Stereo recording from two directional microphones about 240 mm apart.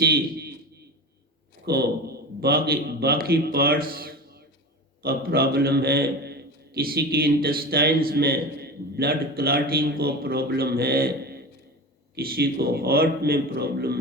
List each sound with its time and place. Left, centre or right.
0.0 s a man's voice: right
1.6 s a man's voice: right